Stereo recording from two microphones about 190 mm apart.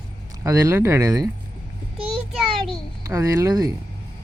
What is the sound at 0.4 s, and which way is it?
Speech, 15° right (ahead or behind).